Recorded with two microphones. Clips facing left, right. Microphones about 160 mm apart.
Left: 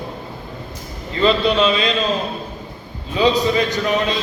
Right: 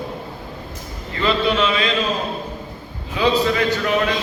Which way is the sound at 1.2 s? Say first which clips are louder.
Left 3 dB; 20° left (ahead or behind).